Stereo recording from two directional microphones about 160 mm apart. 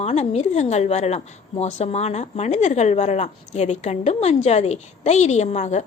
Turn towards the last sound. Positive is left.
turn(degrees=45)  # may be behind; listen again after turning